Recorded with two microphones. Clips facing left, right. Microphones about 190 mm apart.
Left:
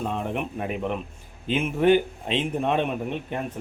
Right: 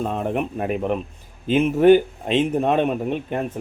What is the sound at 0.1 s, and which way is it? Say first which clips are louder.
Speech: right 5 dB; 45° right (ahead or behind).